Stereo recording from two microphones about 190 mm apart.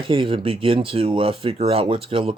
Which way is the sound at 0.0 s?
25° right (ahead or behind).